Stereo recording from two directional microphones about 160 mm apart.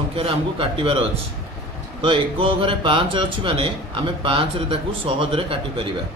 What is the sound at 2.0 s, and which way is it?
Speech, 35° right (ahead or behind).